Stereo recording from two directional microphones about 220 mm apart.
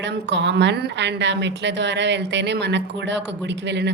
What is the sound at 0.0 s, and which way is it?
A woman's voice, 55° right (ahead or behind).